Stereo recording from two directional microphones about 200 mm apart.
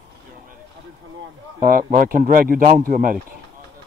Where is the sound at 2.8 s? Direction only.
45° right (ahead or behind).